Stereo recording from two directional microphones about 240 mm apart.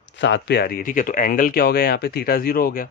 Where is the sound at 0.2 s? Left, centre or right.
Left.